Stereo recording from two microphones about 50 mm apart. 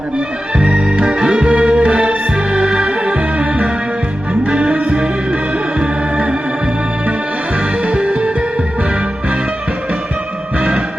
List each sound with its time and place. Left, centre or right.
0.5 s music: right
4.4 s music: right
5.8 s music: centre
7.8 s music: centre
10.6 s music: right